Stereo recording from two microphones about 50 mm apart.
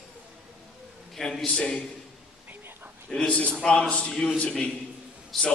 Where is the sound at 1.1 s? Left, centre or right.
Centre.